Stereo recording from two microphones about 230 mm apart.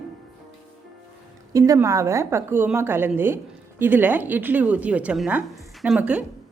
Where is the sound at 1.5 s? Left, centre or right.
Centre.